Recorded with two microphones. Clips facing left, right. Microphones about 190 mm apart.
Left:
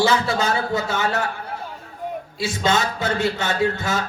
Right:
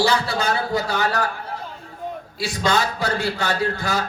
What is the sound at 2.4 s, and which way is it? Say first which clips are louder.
A man's voice: even; 25° left (ahead or behind).